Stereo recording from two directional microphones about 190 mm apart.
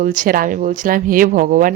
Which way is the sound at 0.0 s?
45° right (ahead or behind).